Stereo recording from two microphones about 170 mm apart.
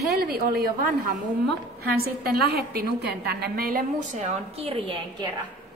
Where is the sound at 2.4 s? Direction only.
65° right (ahead or behind); by 5.2 s 35° right (ahead or behind).